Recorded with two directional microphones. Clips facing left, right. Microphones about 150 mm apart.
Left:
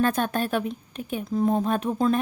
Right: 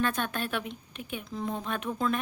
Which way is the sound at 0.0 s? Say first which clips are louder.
Left 6 dB; 40° left (ahead or behind).